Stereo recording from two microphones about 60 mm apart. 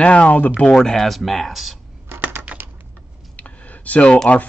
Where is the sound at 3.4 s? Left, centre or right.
Left.